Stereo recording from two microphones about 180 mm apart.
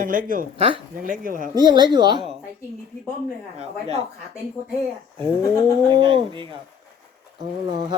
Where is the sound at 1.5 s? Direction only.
25° right (ahead or behind).